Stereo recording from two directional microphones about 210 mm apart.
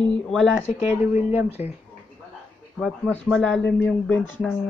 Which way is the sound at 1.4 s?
30° left (ahead or behind).